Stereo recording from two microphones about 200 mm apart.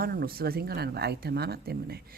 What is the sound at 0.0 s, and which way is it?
Speech, 50° right (ahead or behind).